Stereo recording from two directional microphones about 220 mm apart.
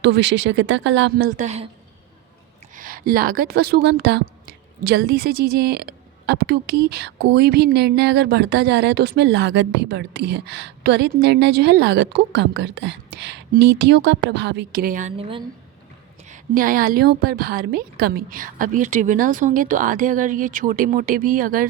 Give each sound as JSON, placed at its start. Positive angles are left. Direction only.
{"t": 0.0, "sound": "speech", "side_deg": -50}
{"t": 2.7, "sound": "a woman's voice", "side_deg": -40}
{"t": 16.3, "sound": "a woman's voice", "side_deg": -40}